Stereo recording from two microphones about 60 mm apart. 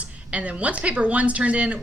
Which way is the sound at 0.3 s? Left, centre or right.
Right.